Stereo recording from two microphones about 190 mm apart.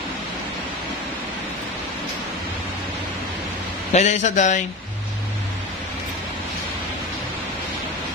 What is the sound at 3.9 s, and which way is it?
Speech, 35° left (ahead or behind).